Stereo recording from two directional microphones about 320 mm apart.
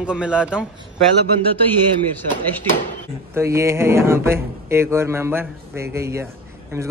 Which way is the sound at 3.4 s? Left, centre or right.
Centre.